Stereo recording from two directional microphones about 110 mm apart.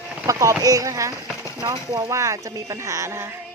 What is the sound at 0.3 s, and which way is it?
Speech, 30° right (ahead or behind).